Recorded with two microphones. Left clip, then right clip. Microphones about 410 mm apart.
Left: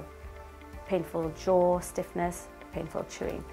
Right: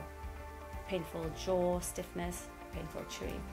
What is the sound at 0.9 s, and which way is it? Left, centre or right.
Speech, left.